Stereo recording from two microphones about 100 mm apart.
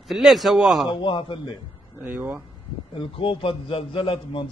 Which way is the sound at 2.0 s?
20° right (ahead or behind).